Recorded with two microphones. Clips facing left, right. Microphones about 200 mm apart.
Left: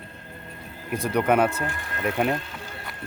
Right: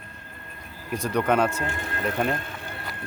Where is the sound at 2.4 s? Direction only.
55° right (ahead or behind).